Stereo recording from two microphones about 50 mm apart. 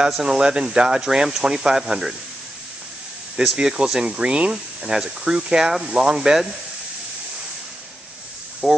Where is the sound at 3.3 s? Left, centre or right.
Centre.